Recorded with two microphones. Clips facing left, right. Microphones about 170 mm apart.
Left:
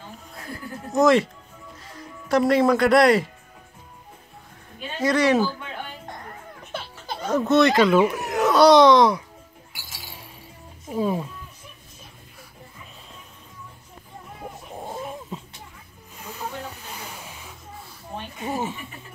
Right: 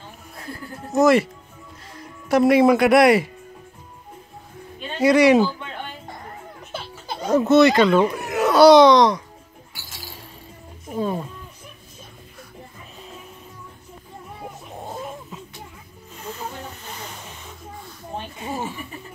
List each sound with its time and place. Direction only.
0.9 s speech: 5° right (ahead or behind)
5.0 s speech: 10° right (ahead or behind)
7.2 s baby laughter: 15° right (ahead or behind)
7.4 s speech: 5° right (ahead or behind)
10.9 s speech: 5° left (ahead or behind)
16.8 s snake: 10° left (ahead or behind)
18.4 s chuckle: 15° left (ahead or behind)